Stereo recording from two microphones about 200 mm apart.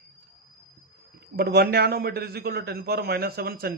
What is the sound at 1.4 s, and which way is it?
Speech, 50° right (ahead or behind).